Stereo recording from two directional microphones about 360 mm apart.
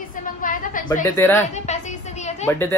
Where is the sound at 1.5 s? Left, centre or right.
Centre.